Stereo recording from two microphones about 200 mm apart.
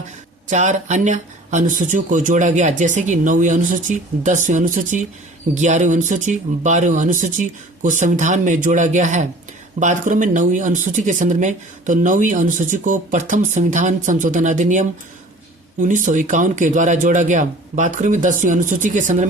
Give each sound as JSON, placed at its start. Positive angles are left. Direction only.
{"t": 0.5, "sound": "speech", "side_deg": -35}